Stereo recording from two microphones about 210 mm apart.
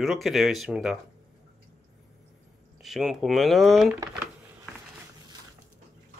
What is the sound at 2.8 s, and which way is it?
Speech, centre (ahead or behind).